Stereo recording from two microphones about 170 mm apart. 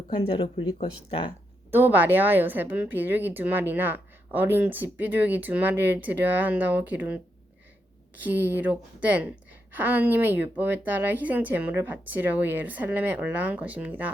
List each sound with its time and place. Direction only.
0.1 s speech: 30° left (ahead or behind)
1.7 s a woman's voice: 10° right (ahead or behind)